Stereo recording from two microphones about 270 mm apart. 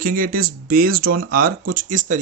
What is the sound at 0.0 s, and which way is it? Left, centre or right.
Speech, right.